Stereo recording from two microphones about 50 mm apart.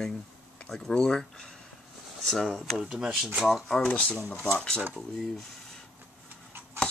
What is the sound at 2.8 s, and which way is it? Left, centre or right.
Speech, centre.